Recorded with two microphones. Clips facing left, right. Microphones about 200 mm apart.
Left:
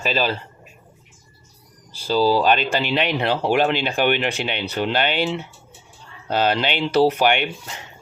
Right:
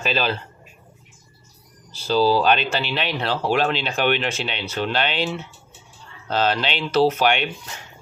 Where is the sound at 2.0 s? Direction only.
10° left (ahead or behind).